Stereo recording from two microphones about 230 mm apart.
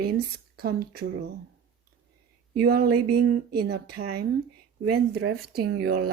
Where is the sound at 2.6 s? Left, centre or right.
Right.